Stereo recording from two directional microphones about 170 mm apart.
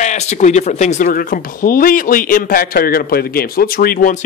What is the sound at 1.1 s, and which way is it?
A man's voice, 55° left (ahead or behind).